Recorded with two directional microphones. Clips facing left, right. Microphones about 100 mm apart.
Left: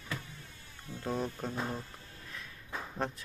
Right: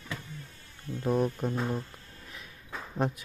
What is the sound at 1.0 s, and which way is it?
Speech, 15° right (ahead or behind).